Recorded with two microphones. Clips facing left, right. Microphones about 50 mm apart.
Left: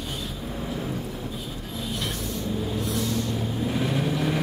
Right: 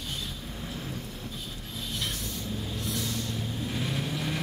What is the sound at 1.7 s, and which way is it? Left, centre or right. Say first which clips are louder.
Mechanisms: left 4 dB; centre.